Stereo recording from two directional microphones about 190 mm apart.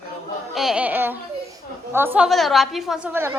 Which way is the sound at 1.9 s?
10° right (ahead or behind).